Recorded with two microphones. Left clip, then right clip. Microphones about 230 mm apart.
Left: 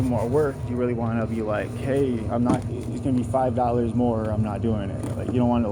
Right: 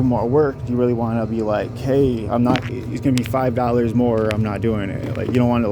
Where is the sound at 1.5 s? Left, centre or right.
Right.